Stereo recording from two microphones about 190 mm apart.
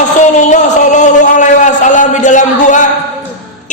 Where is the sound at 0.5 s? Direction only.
40° left (ahead or behind).